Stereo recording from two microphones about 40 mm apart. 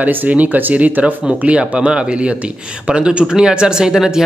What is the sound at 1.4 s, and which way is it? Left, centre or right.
Speech, right.